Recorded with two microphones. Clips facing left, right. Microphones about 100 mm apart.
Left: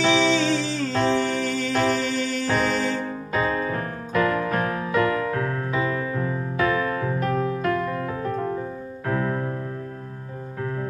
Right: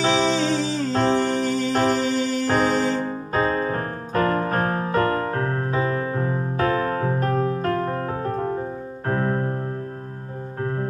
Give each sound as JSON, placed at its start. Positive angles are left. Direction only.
{"t": 0.0, "sound": "music", "side_deg": -40}
{"t": 10.6, "sound": "music", "side_deg": -40}